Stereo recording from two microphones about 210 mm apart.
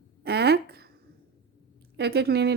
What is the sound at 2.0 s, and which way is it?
Speech, 50° right (ahead or behind).